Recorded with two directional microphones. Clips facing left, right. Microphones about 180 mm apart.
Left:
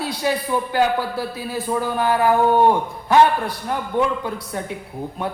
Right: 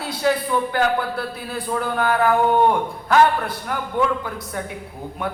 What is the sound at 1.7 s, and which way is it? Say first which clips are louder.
Speech: left 1 dB; 20° left (ahead or behind).